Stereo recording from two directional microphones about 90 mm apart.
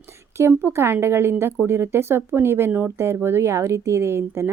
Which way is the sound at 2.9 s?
30° right (ahead or behind).